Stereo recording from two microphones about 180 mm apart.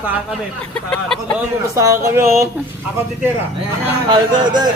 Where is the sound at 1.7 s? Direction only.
15° right (ahead or behind).